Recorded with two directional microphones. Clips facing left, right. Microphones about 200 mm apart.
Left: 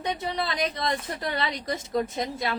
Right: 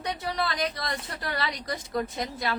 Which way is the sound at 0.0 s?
20° left (ahead or behind).